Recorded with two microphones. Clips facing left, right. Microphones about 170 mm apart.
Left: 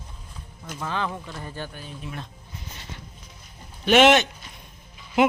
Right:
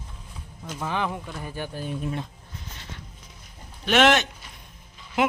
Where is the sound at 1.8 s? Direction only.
50° right (ahead or behind).